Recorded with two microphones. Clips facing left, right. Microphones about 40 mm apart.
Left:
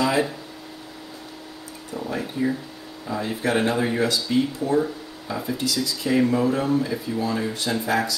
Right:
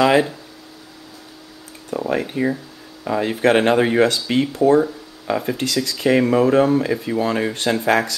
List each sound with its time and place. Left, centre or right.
1.9 s speech: right